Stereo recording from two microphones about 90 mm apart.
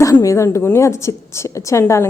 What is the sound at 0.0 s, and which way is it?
A woman's voice, 40° left (ahead or behind).